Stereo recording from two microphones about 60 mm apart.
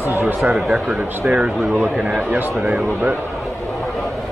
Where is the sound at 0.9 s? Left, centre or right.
Centre.